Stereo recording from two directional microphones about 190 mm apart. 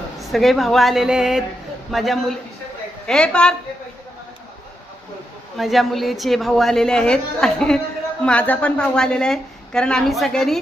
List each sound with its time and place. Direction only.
0.3 s a woman's voice: centre (ahead or behind)
5.5 s a woman's voice: centre (ahead or behind)